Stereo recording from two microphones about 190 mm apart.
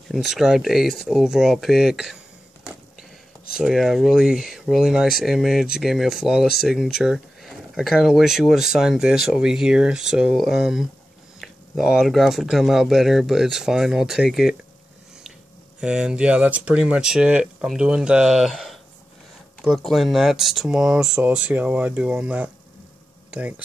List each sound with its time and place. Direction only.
0.1 s speech: centre (ahead or behind)
3.5 s speech: centre (ahead or behind)
6.4 s speech: 55° left (ahead or behind)
7.0 s speech: 5° right (ahead or behind)
15.8 s speech: 5° right (ahead or behind)